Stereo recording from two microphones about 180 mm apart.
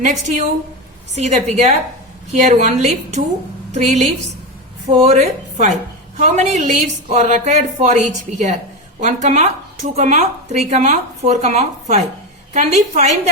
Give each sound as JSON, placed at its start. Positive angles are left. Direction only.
{"t": 0.0, "sound": "a woman's voice", "side_deg": -45}